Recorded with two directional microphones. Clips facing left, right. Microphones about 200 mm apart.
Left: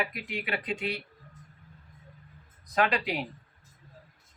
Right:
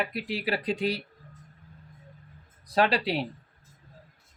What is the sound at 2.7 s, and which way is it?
Speech, 30° right (ahead or behind).